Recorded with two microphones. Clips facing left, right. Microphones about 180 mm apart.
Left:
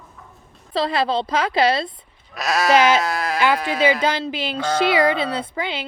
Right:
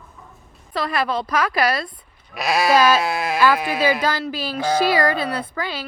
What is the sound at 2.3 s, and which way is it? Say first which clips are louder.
Speech: right 1 dB; 10° right (ahead or behind).